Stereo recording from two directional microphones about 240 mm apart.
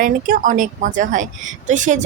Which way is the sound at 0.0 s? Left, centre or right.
Right.